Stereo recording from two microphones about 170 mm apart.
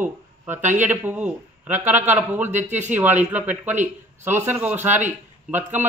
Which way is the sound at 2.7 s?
45° right (ahead or behind).